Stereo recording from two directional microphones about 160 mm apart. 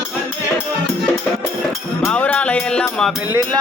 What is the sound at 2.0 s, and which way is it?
Music, 5° left (ahead or behind).